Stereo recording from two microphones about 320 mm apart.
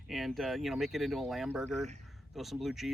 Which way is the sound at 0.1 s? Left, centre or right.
Centre.